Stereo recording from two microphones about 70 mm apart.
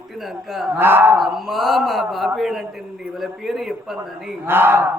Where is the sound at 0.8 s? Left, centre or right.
Right.